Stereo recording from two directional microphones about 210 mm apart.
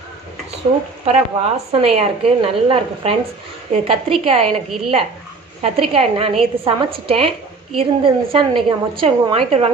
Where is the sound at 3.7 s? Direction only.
25° right (ahead or behind).